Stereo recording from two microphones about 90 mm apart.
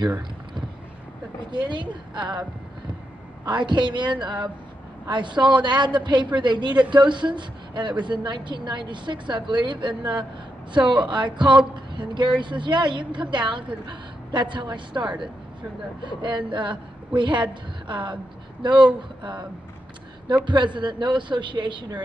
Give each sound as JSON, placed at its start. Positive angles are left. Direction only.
{"t": 1.5, "sound": "a woman's voice", "side_deg": -60}
{"t": 3.4, "sound": "a woman's voice", "side_deg": -55}
{"t": 20.4, "sound": "a woman's voice", "side_deg": -60}